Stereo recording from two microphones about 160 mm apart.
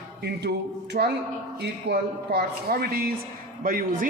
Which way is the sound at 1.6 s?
85° right.